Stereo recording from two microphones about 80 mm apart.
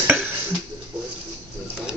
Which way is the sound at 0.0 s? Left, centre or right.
Centre.